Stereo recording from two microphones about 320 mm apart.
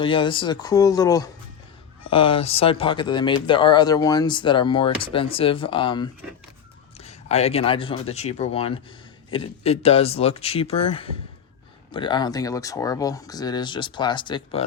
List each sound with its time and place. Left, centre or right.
0.0 s speech: centre